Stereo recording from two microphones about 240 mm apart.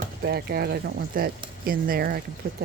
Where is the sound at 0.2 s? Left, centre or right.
Right.